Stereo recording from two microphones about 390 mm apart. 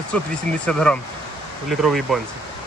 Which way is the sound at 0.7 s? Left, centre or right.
Centre.